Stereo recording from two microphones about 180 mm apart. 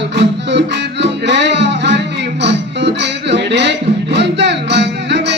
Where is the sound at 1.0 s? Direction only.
75° right (ahead or behind).